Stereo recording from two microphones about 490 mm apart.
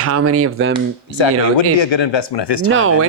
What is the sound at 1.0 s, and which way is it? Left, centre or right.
Speech, left.